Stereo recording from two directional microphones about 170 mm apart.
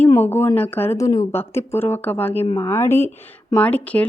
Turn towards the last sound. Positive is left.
turn(degrees=10)  # may be behind; listen again after turning